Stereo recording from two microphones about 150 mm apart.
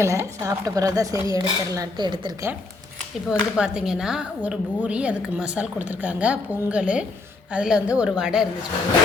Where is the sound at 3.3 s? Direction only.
5° right (ahead or behind).